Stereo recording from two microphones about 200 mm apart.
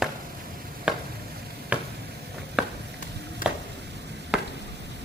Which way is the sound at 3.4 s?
45° left (ahead or behind).